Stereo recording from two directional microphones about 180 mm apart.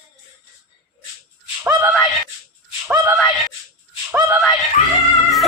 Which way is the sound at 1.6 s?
10° right (ahead or behind).